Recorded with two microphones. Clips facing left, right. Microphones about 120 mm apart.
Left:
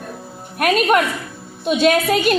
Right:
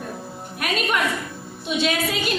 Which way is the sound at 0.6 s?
55° left (ahead or behind).